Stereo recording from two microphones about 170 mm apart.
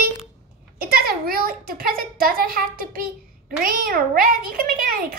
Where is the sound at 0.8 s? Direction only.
60° right (ahead or behind).